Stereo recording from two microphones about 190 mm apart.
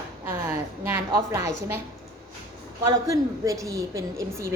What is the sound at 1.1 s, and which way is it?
Speech, 15° right (ahead or behind).